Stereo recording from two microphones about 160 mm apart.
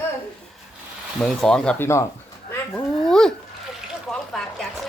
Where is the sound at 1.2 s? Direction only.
Centre (ahead or behind).